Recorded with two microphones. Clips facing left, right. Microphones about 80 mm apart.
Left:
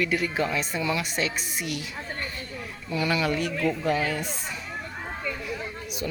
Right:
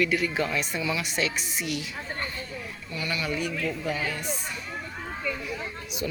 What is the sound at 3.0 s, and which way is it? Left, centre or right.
Speech, left.